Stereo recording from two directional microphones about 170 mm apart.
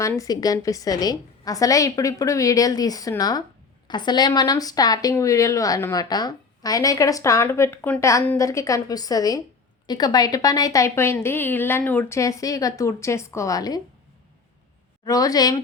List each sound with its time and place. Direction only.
0.2 s speech: 20° left (ahead or behind)
15.0 s speech: 20° left (ahead or behind)